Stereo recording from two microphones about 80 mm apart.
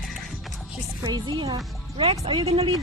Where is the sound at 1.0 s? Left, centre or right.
Right.